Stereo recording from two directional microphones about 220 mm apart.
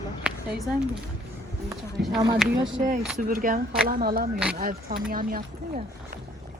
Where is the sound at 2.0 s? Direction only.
50° right (ahead or behind).